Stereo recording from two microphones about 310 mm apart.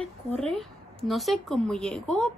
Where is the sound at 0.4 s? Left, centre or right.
Centre.